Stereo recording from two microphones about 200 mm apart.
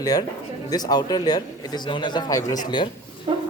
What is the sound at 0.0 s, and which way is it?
A woman's voice, 20° left (ahead or behind).